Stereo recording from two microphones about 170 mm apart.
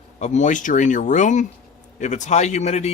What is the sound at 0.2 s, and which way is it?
Speech, 45° left (ahead or behind).